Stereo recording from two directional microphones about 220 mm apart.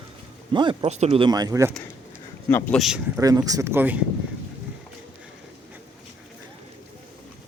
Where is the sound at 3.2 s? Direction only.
15° right (ahead or behind).